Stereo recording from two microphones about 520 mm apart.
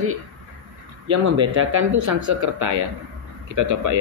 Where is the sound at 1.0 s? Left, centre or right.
Right.